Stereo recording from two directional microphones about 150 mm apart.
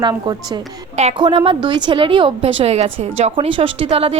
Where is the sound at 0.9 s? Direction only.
45° right (ahead or behind).